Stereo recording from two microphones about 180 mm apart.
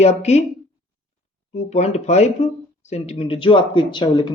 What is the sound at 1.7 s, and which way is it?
Speech, 35° left (ahead or behind).